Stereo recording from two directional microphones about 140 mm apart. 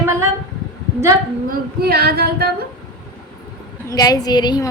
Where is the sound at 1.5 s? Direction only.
90° right.